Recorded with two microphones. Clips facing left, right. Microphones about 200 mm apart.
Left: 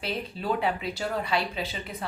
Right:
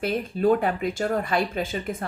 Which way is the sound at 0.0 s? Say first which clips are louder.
Right 9 dB; 50° right (ahead or behind).